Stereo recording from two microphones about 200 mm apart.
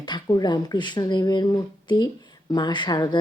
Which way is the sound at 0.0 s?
20° left (ahead or behind).